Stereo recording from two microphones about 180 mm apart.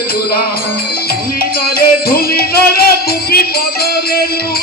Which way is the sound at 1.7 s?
60° left (ahead or behind).